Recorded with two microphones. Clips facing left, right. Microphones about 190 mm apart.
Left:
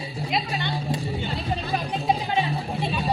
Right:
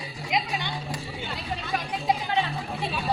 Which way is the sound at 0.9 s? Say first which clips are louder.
Left 6 dB; 30° left (ahead or behind).